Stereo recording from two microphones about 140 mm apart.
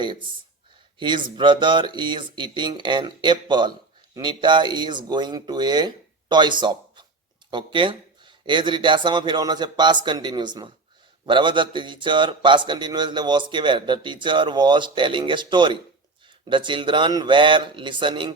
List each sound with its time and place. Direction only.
0.9 s a man's voice: 35° right (ahead or behind)